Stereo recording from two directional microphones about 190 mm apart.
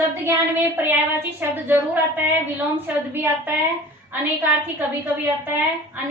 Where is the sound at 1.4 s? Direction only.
10° right (ahead or behind).